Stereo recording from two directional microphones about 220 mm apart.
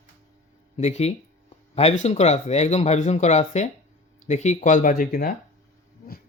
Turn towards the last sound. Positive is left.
turn(degrees=40)  # may be behind; listen again after turning